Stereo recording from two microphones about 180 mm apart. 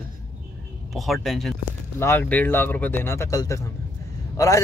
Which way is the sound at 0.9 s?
Centre (ahead or behind).